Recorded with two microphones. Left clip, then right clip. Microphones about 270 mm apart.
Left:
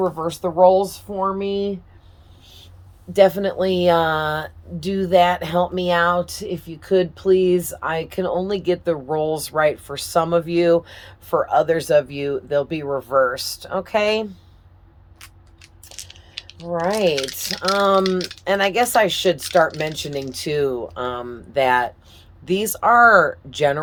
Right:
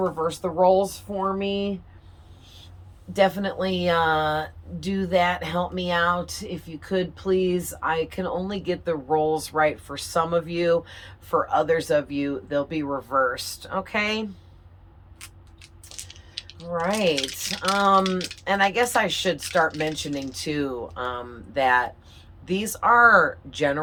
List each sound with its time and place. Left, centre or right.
0.0 s speech: left
3.1 s speech: left
16.0 s a sound: centre
16.8 s speech: left
18.4 s speech: left
19.4 s speech: left